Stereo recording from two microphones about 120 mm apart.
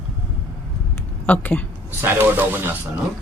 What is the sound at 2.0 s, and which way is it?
Speech, 20° right (ahead or behind).